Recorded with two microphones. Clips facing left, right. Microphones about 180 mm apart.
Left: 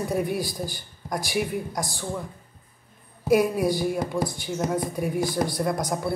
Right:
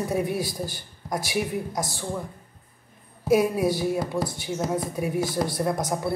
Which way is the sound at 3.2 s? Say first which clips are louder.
Even; 5° right (ahead or behind).